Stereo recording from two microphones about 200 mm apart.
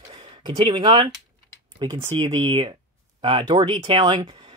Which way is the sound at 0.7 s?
25° right (ahead or behind).